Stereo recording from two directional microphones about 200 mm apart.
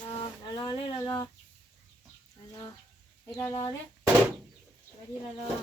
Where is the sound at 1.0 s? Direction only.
10° left (ahead or behind).